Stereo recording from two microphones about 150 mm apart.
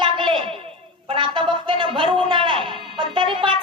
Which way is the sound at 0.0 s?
35° right (ahead or behind).